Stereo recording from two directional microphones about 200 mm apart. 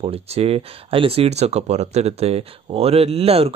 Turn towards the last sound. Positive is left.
turn(degrees=-30)  # may be behind; listen again after turning